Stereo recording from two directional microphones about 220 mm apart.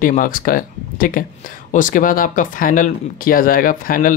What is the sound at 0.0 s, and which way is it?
Speech, 40° left (ahead or behind).